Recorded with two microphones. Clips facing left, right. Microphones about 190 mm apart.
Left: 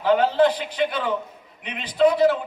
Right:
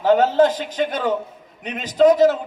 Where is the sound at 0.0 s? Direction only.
45° right (ahead or behind).